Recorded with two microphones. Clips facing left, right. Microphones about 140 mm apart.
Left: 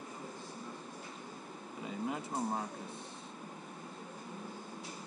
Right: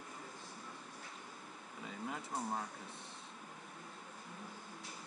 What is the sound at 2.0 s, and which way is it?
Speech, 15° left (ahead or behind).